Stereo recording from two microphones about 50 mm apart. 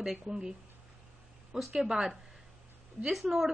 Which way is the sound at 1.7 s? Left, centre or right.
Centre.